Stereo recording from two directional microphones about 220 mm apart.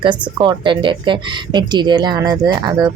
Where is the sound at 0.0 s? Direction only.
20° right (ahead or behind).